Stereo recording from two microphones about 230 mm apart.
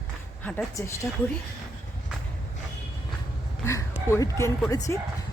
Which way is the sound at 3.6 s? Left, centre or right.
Centre.